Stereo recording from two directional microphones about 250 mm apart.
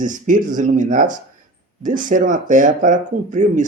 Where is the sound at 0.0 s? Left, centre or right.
Right.